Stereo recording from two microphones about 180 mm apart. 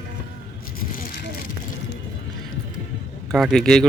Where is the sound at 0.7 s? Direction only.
55° left (ahead or behind).